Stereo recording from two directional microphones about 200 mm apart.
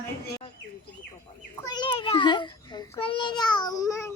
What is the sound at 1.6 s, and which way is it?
A child's voice, 20° left (ahead or behind).